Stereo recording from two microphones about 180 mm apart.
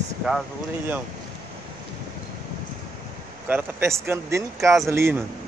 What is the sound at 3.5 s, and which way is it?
Speech, 10° right (ahead or behind).